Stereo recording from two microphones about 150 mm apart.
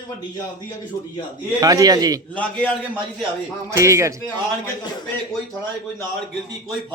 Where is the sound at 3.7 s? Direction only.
20° right (ahead or behind).